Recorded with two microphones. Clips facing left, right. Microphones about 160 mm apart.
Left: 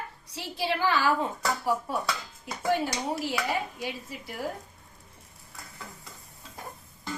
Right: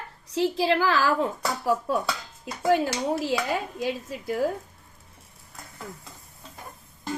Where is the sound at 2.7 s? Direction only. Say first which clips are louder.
Right 5 dB; 90° right.